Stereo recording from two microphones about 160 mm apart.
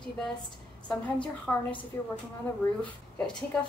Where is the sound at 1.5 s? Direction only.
10° left (ahead or behind).